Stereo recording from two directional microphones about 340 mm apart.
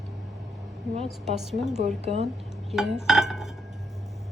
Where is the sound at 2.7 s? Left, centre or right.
Centre.